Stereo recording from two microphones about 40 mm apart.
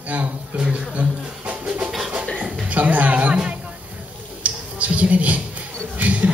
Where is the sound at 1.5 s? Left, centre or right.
Right.